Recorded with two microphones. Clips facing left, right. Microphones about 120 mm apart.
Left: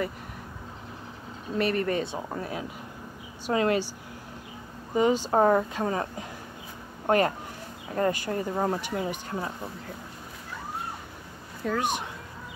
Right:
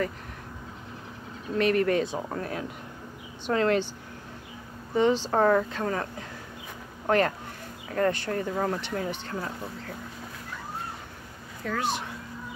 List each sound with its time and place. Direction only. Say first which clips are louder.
1.6 s speech: right 3 dB; centre (ahead or behind)
4.9 s speech: even; 10° left (ahead or behind)
11.6 s speech: left 2 dB; 15° left (ahead or behind)